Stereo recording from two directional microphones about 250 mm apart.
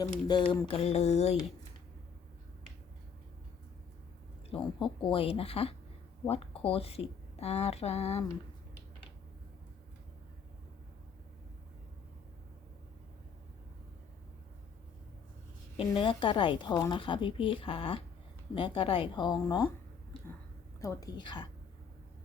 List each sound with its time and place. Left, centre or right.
0.3 s speech: centre
4.4 s speech: left
15.8 s speech: centre
20.8 s a woman's voice: centre